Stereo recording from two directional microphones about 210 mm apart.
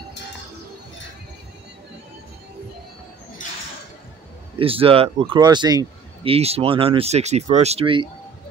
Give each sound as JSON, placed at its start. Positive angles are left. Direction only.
{"t": 4.6, "sound": "speech", "side_deg": -25}